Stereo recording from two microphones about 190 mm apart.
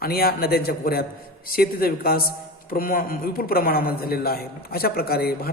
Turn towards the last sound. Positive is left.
turn(degrees=55)  # may be behind; listen again after turning